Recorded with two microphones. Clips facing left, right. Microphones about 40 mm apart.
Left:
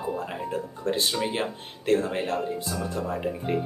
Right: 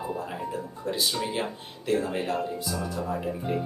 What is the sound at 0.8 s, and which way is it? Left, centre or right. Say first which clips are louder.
Speech: left 4 dB; left.